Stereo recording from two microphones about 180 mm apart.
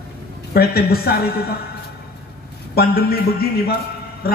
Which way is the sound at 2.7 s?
60° left (ahead or behind).